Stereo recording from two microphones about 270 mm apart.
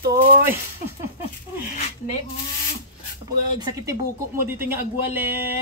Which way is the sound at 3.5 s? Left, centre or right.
Centre.